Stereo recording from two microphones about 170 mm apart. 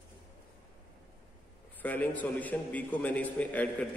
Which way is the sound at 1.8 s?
10° left (ahead or behind).